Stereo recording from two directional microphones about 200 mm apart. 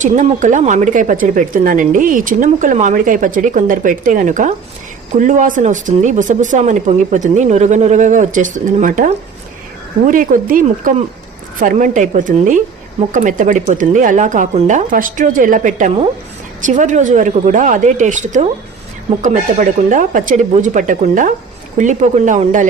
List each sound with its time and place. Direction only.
0.0 s a woman's voice: 40° right (ahead or behind)